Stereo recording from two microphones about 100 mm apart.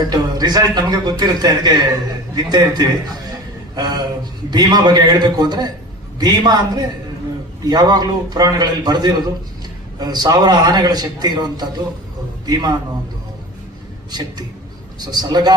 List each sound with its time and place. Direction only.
0.0 s a man's voice: 45° right (ahead or behind)
14.1 s a man's voice: 40° right (ahead or behind)